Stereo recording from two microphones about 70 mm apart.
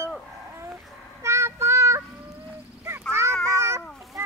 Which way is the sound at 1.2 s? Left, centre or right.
Right.